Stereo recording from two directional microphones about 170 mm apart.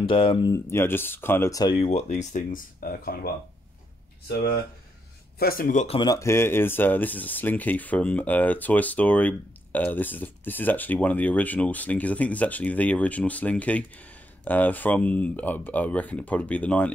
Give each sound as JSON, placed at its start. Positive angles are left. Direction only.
{"t": 0.0, "sound": "speech", "side_deg": 30}
{"t": 0.5, "sound": "speech", "side_deg": 15}
{"t": 1.9, "sound": "speech", "side_deg": 40}
{"t": 5.4, "sound": "speech", "side_deg": 60}
{"t": 5.9, "sound": "speech", "side_deg": 20}